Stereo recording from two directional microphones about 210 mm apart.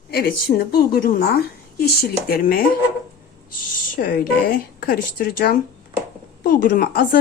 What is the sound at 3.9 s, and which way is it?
A woman's voice, 45° left (ahead or behind).